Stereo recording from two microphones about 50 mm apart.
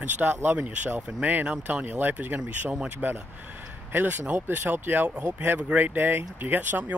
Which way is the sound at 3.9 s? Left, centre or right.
Right.